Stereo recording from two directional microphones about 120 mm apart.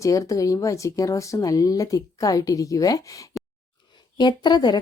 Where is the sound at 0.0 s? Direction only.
25° left (ahead or behind).